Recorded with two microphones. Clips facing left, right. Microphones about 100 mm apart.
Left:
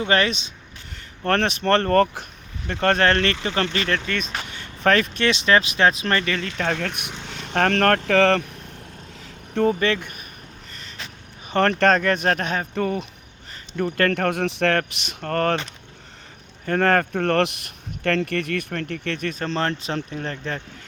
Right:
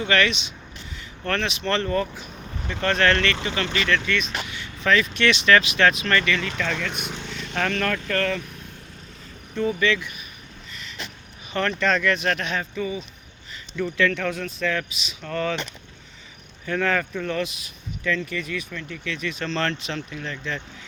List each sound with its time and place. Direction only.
0.0 s speech: 35° left (ahead or behind)
1.2 s speech: 50° left (ahead or behind); by 2.2 s 65° left (ahead or behind)
2.6 s speech: 50° left (ahead or behind)
5.1 s speech: 35° left (ahead or behind); by 7.7 s 55° left (ahead or behind)
7.7 s speech: 65° left (ahead or behind); by 8.4 s 85° left
9.2 s vehicle: 65° left (ahead or behind)
9.7 s speech: 50° left (ahead or behind)
10.7 s a sound: 45° left (ahead or behind)
11.5 s speech: 55° left (ahead or behind)
12.7 s speech: 65° left (ahead or behind)
13.7 s speech: 50° left (ahead or behind)
16.6 s speech: 50° left (ahead or behind)